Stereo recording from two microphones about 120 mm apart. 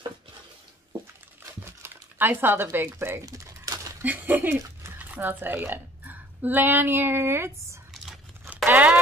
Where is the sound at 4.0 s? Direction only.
15° right (ahead or behind).